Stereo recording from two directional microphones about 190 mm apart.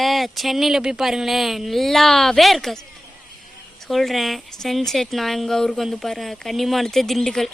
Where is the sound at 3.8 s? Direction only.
Centre (ahead or behind).